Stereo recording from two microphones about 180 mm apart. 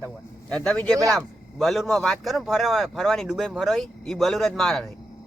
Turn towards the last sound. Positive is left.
turn(degrees=5)  # may be behind; listen again after turning